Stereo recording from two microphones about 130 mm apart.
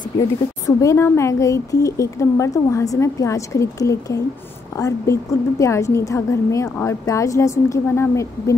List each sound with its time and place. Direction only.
0.2 s a woman's voice: 25° left (ahead or behind)